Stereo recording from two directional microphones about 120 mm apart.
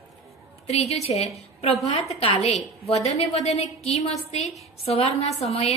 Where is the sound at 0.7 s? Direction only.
65° left (ahead or behind).